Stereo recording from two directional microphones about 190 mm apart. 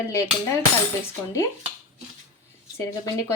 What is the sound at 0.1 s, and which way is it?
Speech, 15° left (ahead or behind).